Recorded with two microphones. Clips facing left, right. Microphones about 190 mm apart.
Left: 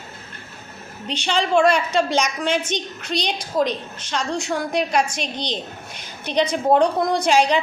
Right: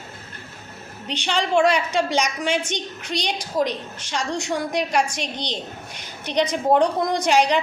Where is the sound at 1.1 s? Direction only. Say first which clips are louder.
Left 2 dB; 15° right (ahead or behind).